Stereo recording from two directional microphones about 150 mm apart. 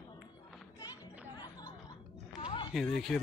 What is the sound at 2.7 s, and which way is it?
Speech, 5° left (ahead or behind).